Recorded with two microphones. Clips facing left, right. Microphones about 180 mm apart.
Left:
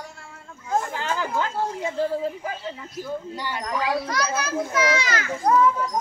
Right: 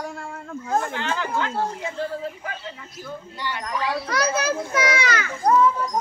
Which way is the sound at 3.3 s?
40° left (ahead or behind).